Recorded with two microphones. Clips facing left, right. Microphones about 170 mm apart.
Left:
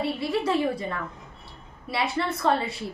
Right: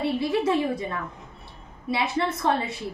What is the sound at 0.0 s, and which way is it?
Speech, 25° right (ahead or behind).